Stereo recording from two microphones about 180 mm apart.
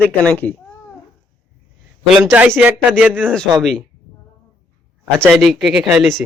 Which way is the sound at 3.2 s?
5° left (ahead or behind).